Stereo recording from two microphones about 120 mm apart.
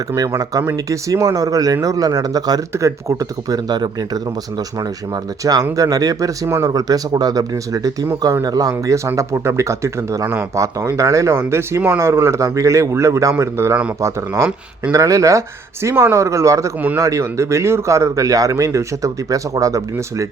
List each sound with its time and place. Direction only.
0.1 s speech: 30° right (ahead or behind)